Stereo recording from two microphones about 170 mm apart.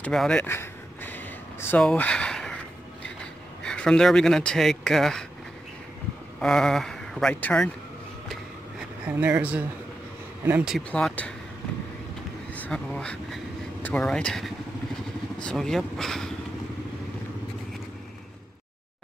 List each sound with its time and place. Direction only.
0.0 s a sound: 5° left (ahead or behind)
6.4 s speech: 5° left (ahead or behind)
9.0 s speech: 10° right (ahead or behind)
10.9 s speech: 5° left (ahead or behind)
12.5 s speech: 5° left (ahead or behind)